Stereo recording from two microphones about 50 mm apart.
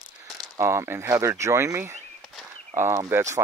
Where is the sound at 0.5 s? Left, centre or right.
Right.